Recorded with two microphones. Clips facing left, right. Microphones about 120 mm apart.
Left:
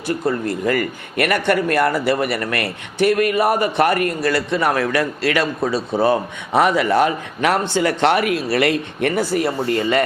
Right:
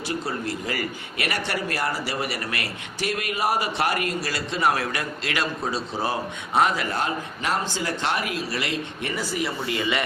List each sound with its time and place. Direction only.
0.1 s a man's voice: 55° left (ahead or behind)
9.6 s speech: 45° left (ahead or behind)